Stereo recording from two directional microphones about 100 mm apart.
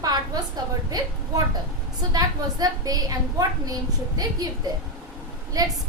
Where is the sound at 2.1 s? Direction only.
40° right (ahead or behind).